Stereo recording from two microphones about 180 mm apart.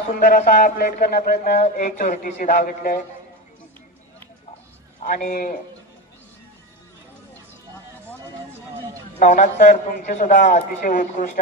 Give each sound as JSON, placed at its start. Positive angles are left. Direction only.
{"t": 0.1, "sound": "a man's voice", "side_deg": 45}
{"t": 5.0, "sound": "a man's voice", "side_deg": 45}
{"t": 9.2, "sound": "a man's voice", "side_deg": 45}